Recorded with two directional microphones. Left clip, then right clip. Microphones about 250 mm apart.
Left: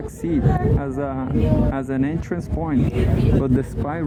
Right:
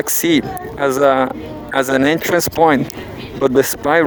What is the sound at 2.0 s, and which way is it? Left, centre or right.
Speech, right.